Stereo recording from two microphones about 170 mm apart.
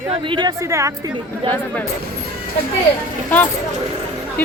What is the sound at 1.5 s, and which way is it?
Speech, 10° left (ahead or behind).